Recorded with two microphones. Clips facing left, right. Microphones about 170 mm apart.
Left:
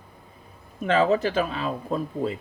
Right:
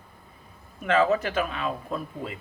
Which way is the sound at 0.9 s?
30° left (ahead or behind).